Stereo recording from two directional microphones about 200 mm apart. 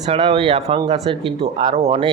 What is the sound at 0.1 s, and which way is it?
Speech, 30° right (ahead or behind).